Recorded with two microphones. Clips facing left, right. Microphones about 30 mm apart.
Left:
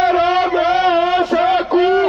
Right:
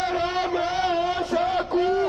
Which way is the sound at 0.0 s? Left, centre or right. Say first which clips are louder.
Left 11 dB; left.